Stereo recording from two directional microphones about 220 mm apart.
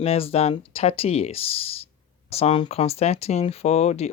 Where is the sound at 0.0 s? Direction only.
25° left (ahead or behind).